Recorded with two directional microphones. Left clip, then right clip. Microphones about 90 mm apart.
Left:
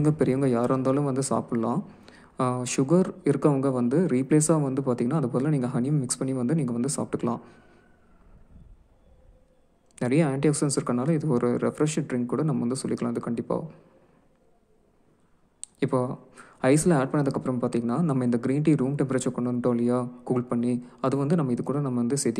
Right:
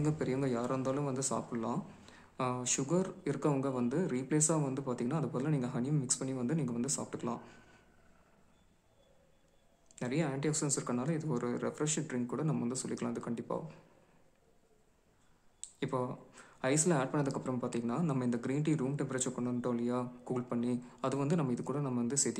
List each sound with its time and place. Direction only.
0.0 s speech: 50° left (ahead or behind)
2.0 s a sound: 50° left (ahead or behind)
2.6 s speech: 50° left (ahead or behind)
9.9 s a man's voice: 60° left (ahead or behind)
15.6 s a sound: 50° left (ahead or behind)
16.3 s a man's voice: 50° left (ahead or behind)